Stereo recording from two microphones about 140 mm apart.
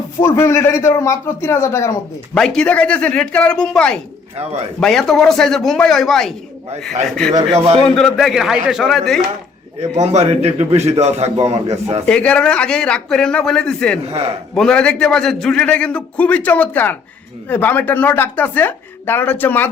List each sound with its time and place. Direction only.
0.2 s a man's voice: 20° left (ahead or behind)
2.3 s a man's voice: 5° left (ahead or behind)
9.8 s a man's voice: 55° right (ahead or behind)
12.0 s a man's voice: 10° left (ahead or behind)